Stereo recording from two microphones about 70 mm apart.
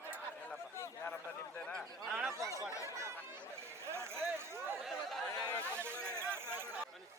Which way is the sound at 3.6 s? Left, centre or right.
Right.